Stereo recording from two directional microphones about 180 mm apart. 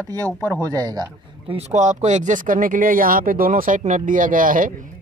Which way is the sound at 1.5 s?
40° right (ahead or behind).